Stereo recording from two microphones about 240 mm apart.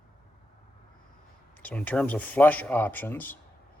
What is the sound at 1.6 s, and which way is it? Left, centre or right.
Speech, centre.